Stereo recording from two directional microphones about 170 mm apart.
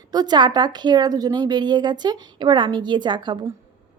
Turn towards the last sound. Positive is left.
turn(degrees=-25)  # may be behind; listen again after turning